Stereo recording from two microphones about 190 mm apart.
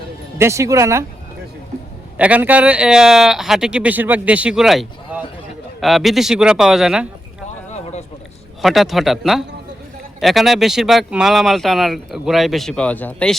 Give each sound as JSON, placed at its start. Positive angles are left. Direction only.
{"t": 0.3, "sound": "speech", "side_deg": -15}
{"t": 2.1, "sound": "speech", "side_deg": -5}
{"t": 7.7, "sound": "a sound", "side_deg": 35}
{"t": 8.6, "sound": "speech", "side_deg": 0}